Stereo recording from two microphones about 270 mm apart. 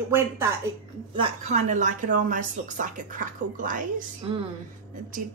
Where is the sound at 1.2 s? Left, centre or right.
Right.